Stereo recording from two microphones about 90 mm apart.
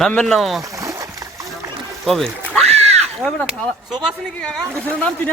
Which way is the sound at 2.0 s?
5° left (ahead or behind).